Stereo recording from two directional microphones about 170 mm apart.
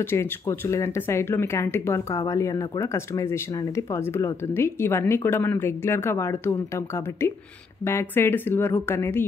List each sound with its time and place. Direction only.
0.1 s speech: 15° left (ahead or behind)
7.8 s speech: 15° left (ahead or behind)